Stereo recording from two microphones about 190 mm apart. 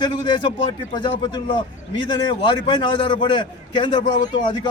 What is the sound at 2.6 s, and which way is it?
A man's voice, 25° left (ahead or behind).